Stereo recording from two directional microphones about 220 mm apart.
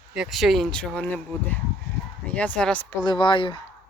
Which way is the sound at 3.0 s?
20° left (ahead or behind).